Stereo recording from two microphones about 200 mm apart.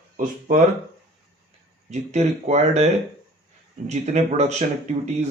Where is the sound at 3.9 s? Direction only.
35° right (ahead or behind).